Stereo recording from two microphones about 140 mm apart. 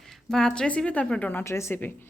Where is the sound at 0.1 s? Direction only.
5° left (ahead or behind).